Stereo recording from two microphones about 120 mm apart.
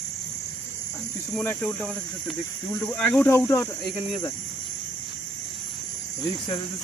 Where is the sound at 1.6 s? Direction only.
10° left (ahead or behind).